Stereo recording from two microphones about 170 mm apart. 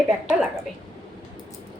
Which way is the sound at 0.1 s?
5° right (ahead or behind).